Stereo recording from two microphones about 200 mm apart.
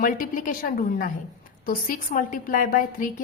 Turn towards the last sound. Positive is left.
turn(degrees=45)  # may be behind; listen again after turning